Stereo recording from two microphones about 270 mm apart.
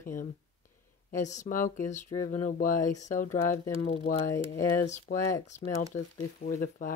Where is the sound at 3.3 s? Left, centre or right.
Centre.